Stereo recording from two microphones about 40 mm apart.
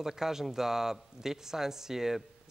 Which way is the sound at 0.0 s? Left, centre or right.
Centre.